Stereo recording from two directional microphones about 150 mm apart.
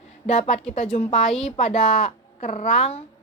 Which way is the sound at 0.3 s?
55° left (ahead or behind).